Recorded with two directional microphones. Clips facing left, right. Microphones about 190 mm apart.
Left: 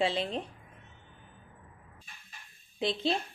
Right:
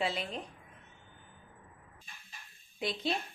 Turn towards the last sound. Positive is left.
turn(degrees=25)  # may be behind; listen again after turning